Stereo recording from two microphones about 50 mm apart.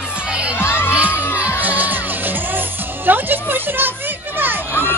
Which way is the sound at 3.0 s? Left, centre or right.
Right.